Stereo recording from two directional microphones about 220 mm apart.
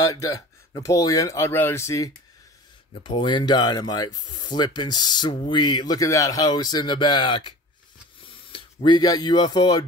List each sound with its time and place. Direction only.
0.0 s speech: 15° left (ahead or behind)